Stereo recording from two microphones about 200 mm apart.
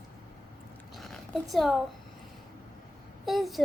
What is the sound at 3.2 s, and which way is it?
Speech, centre (ahead or behind).